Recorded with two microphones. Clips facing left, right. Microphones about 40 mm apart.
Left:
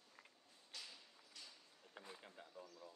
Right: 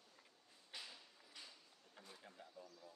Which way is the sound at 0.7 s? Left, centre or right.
Centre.